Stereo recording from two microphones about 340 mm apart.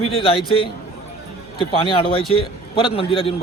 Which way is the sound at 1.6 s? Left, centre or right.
Centre.